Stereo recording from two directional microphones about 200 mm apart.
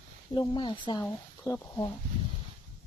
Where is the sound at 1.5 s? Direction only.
10° left (ahead or behind).